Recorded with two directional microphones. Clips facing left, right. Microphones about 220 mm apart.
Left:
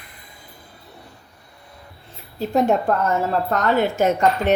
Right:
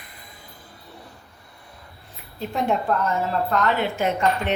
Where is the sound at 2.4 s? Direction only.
40° left (ahead or behind).